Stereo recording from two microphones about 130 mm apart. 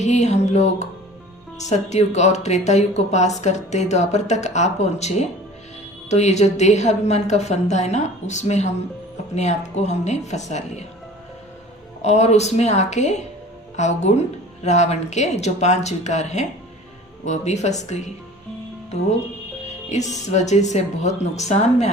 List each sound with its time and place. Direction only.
0.0 s speech: 60° left (ahead or behind)
12.0 s speech: 60° left (ahead or behind)
20.3 s speech: 60° left (ahead or behind)